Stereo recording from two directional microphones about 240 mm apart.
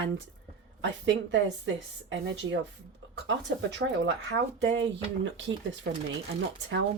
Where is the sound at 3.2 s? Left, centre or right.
Right.